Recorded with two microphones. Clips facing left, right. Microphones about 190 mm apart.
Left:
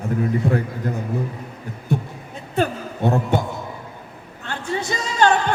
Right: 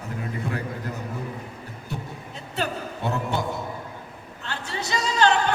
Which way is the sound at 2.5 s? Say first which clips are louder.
Left 7 dB; 50° left (ahead or behind).